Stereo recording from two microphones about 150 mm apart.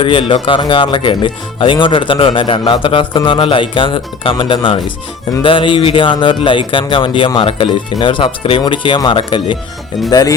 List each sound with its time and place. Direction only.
0.0 s speech: 35° left (ahead or behind)